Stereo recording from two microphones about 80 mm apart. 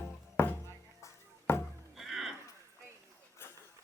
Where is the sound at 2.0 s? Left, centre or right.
Centre.